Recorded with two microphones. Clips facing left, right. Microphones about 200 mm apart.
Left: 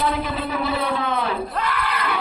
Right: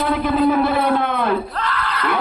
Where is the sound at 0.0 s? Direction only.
50° right (ahead or behind).